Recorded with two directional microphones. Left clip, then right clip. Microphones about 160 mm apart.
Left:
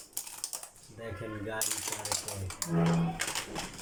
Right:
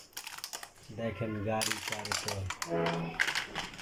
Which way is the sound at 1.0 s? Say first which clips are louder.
Right 5 dB; 15° right (ahead or behind).